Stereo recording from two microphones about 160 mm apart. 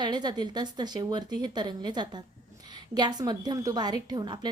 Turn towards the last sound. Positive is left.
turn(degrees=-25)  # may be behind; listen again after turning